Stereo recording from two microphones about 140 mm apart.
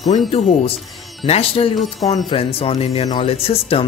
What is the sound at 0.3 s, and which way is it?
Speech, 45° left (ahead or behind).